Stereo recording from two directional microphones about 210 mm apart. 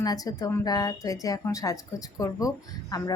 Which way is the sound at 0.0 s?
15° left (ahead or behind).